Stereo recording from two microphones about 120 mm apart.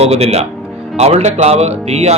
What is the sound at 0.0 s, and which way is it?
Speech, 65° right (ahead or behind).